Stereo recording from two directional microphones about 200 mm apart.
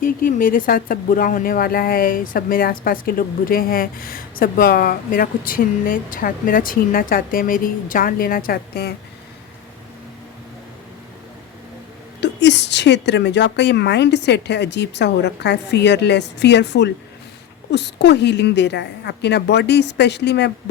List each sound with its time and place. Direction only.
0.0 s speech: 45° left (ahead or behind)
12.2 s a woman's voice: 60° left (ahead or behind)